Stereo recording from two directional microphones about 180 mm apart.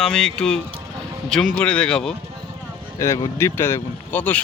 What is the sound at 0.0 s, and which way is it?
Speech, 5° left (ahead or behind).